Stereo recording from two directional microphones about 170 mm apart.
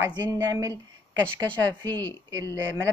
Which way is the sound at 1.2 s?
10° left (ahead or behind).